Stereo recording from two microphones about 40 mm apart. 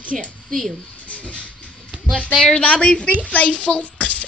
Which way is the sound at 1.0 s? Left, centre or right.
Left.